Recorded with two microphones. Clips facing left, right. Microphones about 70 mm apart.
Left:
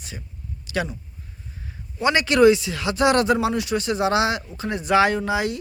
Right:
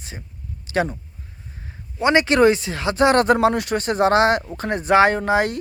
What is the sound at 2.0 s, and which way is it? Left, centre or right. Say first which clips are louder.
Speech: right 1 dB; right.